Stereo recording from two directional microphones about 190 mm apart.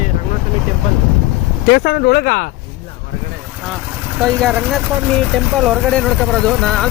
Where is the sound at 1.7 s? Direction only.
55° left (ahead or behind).